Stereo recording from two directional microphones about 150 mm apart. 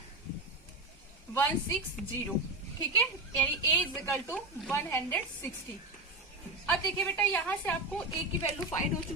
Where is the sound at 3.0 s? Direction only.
10° left (ahead or behind).